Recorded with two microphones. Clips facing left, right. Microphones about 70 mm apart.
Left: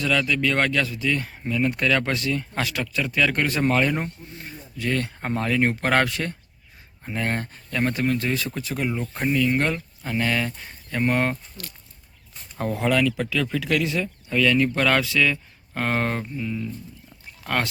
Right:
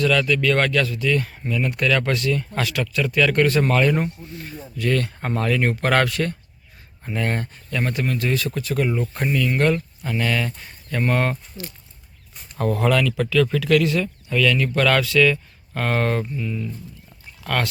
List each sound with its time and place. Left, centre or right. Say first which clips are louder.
0.0 s speech: right 3 dB; centre
10.9 s speech: right 1 dB; centre
12.5 s speech: right 2 dB; centre
14.3 s speech: left 1 dB; left